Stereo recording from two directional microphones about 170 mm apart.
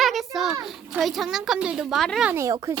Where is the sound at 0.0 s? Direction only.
Centre (ahead or behind).